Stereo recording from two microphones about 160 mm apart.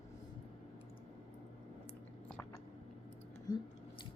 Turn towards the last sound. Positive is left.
turn(degrees=25)  # may be behind; listen again after turning